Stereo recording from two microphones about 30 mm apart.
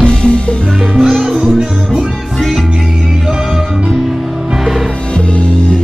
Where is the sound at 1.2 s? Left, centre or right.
Centre.